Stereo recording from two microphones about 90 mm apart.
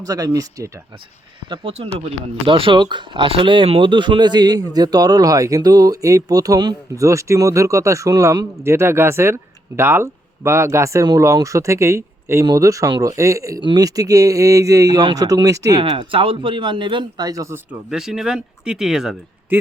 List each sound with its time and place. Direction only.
0.0 s a man's voice: 45° right (ahead or behind)
1.5 s speech: 90° right
2.5 s speech: 75° right (ahead or behind)
2.8 s a man's voice: 60° right (ahead or behind)
6.9 s speech: 35° right (ahead or behind)
15.7 s speech: 85° right; by 17.5 s 45° right (ahead or behind)
17.9 s speech: 5° right (ahead or behind)